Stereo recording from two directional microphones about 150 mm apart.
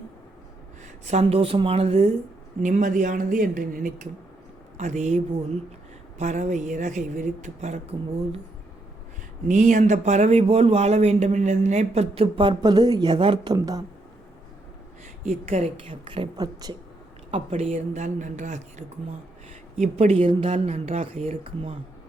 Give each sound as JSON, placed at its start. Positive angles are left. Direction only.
{"t": 1.0, "sound": "speech", "side_deg": -45}
{"t": 9.5, "sound": "speech", "side_deg": -55}
{"t": 15.2, "sound": "speech", "side_deg": -50}
{"t": 16.0, "sound": "a woman's voice", "side_deg": -35}
{"t": 17.3, "sound": "speech", "side_deg": -40}